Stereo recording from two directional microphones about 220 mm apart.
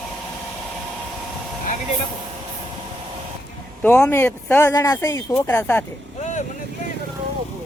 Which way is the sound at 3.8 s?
5° left (ahead or behind).